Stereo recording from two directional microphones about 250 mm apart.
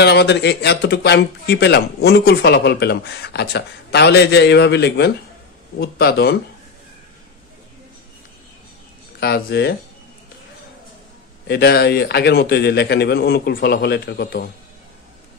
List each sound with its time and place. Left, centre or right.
0.0 s speech: left
9.2 s speech: left
11.4 s speech: left